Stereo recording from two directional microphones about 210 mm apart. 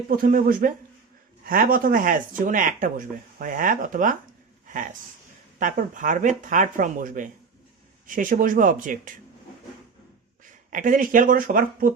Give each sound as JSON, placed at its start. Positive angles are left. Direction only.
{"t": 0.2, "sound": "speech", "side_deg": -40}
{"t": 5.5, "sound": "speech", "side_deg": -40}
{"t": 10.7, "sound": "speech", "side_deg": -40}